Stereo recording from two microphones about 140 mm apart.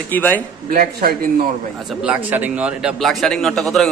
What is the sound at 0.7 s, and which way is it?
Speech, 75° right (ahead or behind).